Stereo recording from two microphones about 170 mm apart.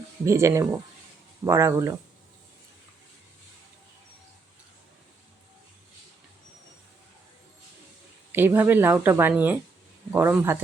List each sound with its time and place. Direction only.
0.3 s speech: 15° right (ahead or behind)
8.3 s speech: 10° right (ahead or behind)